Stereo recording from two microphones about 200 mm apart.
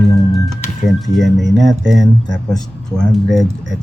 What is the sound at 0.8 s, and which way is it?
Speech, centre (ahead or behind).